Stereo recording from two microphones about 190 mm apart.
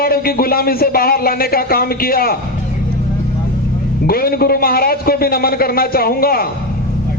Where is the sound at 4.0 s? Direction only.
50° left (ahead or behind).